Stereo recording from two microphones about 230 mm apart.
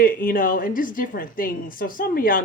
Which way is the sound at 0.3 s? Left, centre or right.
Left.